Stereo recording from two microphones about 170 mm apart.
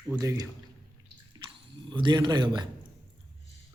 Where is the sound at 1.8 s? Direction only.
30° right (ahead or behind).